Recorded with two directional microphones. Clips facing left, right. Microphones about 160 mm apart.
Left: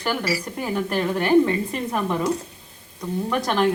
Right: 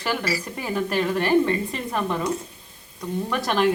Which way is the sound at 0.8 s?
Centre (ahead or behind).